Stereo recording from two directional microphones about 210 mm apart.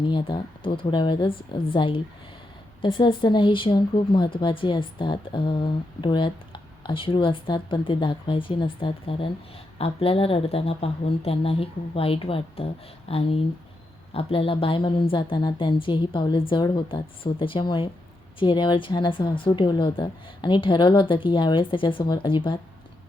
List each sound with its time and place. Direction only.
0.0 s speech: 25° left (ahead or behind)